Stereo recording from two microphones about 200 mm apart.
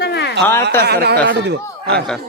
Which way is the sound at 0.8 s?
55° right (ahead or behind).